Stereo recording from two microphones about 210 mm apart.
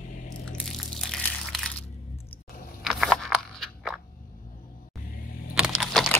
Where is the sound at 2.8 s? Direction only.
Centre (ahead or behind).